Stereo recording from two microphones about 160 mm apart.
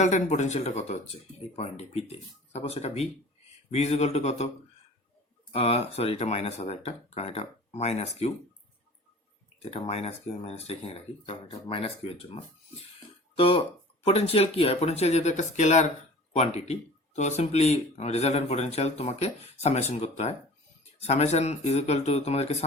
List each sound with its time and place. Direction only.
0.0 s a man's voice: 50° left (ahead or behind)
5.5 s speech: 40° left (ahead or behind)
9.6 s a man's voice: 40° left (ahead or behind)